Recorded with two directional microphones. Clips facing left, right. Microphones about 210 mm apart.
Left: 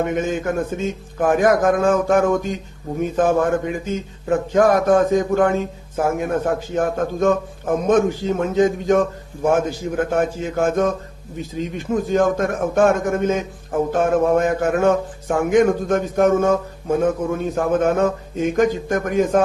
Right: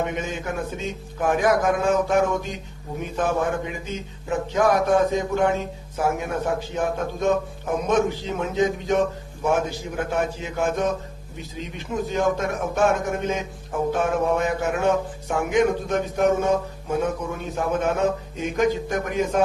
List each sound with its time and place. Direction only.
0.0 s a man's voice: 50° left (ahead or behind)